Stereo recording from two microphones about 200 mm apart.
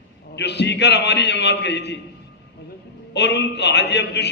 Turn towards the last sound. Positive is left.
turn(degrees=55)  # may be behind; listen again after turning